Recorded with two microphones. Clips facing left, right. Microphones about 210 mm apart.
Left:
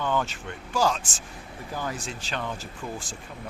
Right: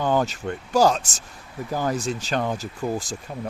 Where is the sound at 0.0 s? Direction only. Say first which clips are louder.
Right 6 dB; 40° right (ahead or behind).